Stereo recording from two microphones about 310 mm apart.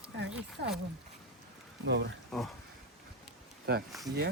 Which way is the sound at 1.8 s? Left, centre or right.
Right.